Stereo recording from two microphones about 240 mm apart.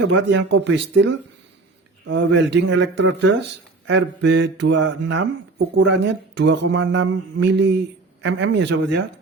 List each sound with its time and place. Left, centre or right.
0.1 s speech: right